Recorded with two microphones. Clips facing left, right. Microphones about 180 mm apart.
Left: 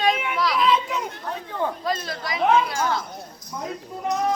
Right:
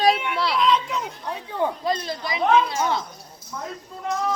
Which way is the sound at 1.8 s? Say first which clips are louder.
Right 2 dB; 25° right (ahead or behind).